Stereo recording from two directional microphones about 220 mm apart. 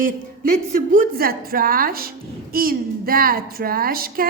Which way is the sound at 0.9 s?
40° right (ahead or behind).